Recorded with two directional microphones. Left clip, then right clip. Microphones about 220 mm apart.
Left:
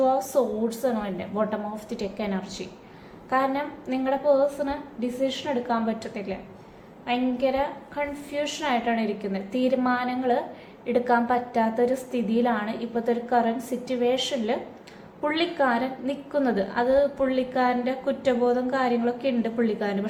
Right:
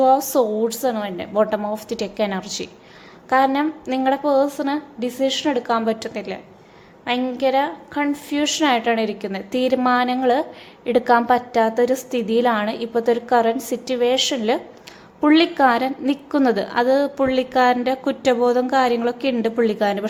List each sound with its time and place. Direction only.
0.0 s a woman's voice: 45° right (ahead or behind)